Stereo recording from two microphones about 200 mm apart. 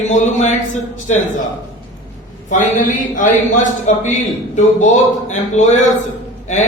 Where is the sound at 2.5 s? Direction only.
40° left (ahead or behind).